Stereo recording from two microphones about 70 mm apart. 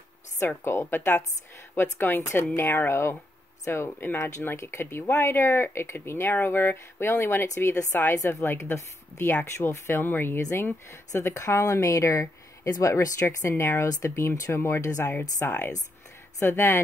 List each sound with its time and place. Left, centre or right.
0.7 s speech: left
3.6 s speech: left
7.4 s speech: left
15.3 s speech: left
16.3 s speech: left